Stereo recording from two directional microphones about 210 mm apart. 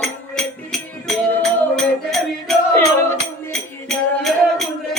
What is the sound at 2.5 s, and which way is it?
Music, centre (ahead or behind).